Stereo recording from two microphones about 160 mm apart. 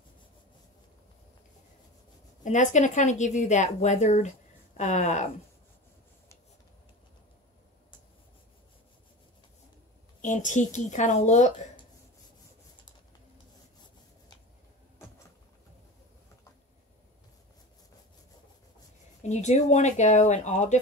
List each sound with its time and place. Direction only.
2.4 s speech: 50° left (ahead or behind)
10.2 s speech: 50° left (ahead or behind)
19.2 s speech: 45° left (ahead or behind)